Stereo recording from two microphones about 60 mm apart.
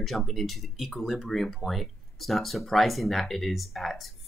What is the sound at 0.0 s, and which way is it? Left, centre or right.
Speech, centre.